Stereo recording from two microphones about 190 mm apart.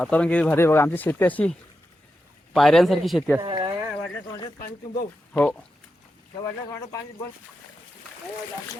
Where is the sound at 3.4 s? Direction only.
25° right (ahead or behind).